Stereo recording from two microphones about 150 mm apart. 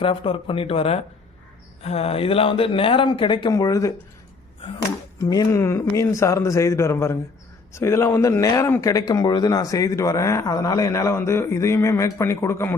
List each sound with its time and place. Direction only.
0.0 s speech: 35° left (ahead or behind)
5.2 s speech: 20° left (ahead or behind)